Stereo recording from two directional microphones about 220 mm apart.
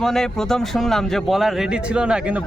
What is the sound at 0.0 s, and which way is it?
Speech, centre (ahead or behind).